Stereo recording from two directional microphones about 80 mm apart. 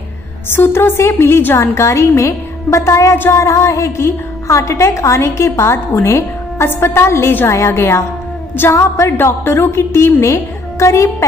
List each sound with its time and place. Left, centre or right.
0.5 s a woman's voice: left